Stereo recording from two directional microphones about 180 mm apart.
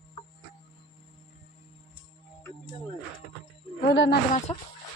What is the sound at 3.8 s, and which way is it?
Speech, 70° left (ahead or behind).